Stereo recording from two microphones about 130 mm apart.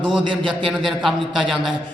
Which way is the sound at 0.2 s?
40° right (ahead or behind).